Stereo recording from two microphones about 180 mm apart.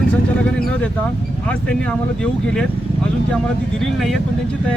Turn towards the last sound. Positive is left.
turn(degrees=0)  # may be behind; listen again after turning